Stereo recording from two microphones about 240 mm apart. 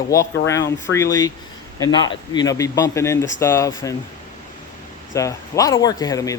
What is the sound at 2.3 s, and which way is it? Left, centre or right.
A man's voice, centre.